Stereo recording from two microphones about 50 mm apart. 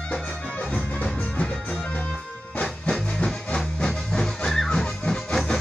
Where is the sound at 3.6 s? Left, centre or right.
Centre.